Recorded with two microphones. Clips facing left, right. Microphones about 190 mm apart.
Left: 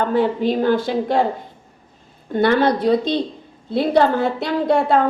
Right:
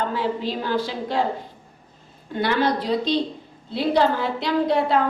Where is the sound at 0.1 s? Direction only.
55° left (ahead or behind).